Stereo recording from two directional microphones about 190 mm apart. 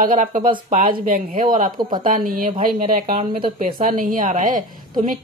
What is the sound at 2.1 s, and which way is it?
Speech, 45° right (ahead or behind).